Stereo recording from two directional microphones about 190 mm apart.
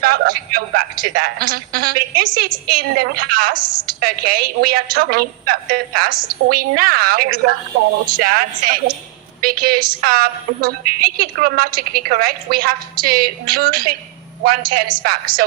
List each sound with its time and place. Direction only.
0.0 s a woman's voice: 50° right (ahead or behind)